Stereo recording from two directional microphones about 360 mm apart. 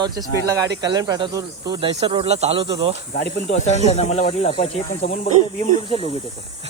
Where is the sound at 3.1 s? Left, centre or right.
Left.